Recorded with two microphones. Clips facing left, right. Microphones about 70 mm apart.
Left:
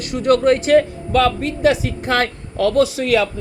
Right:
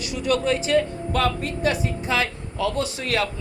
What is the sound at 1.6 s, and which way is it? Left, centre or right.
Speech, left.